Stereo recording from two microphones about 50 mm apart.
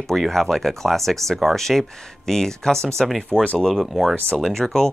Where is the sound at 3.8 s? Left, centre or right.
Centre.